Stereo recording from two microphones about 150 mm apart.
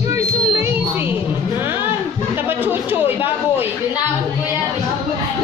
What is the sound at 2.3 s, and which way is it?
Chatter, 15° right (ahead or behind).